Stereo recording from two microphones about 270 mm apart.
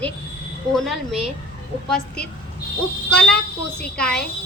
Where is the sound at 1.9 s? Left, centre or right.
Centre.